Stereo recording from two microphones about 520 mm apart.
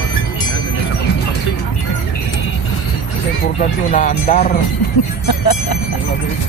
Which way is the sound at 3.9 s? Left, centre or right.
Centre.